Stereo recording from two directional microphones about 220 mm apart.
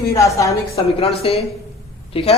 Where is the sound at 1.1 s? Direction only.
25° left (ahead or behind).